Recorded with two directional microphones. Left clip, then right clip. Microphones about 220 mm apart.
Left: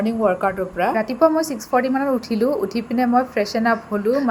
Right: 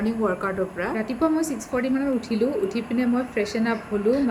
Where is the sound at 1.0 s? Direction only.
Centre (ahead or behind).